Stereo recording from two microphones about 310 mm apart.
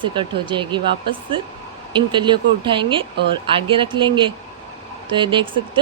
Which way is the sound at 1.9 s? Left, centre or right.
Centre.